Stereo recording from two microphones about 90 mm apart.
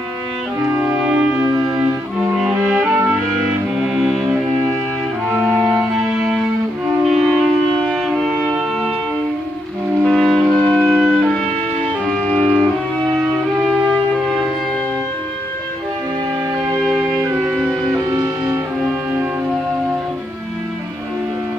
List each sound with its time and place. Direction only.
0.7 s music: 20° right (ahead or behind)
1.0 s music: 10° right (ahead or behind)
10.0 s music: centre (ahead or behind)
13.7 s music: 5° left (ahead or behind)
18.1 s music: 30° right (ahead or behind)